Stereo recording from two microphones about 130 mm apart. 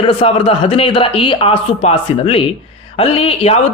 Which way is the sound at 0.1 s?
45° left (ahead or behind).